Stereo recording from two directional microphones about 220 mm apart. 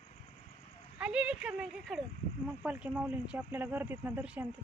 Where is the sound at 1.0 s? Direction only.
5° right (ahead or behind).